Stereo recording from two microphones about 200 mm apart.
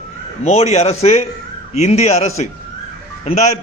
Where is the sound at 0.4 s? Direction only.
35° left (ahead or behind).